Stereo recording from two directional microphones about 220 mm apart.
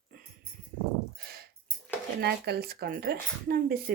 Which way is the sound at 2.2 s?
45° right (ahead or behind).